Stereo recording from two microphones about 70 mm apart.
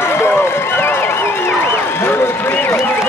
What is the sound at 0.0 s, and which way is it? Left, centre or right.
Run, left.